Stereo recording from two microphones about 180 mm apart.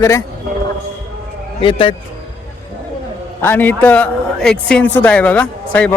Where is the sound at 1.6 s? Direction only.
30° left (ahead or behind).